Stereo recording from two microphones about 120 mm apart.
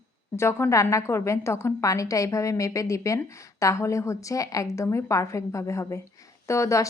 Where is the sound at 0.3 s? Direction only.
20° left (ahead or behind).